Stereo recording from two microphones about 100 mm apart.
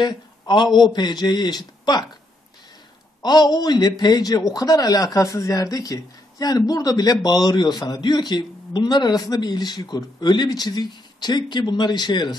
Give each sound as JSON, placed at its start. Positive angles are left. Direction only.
{"t": 0.0, "sound": "a man's voice", "side_deg": 50}
{"t": 3.2, "sound": "a man's voice", "side_deg": 45}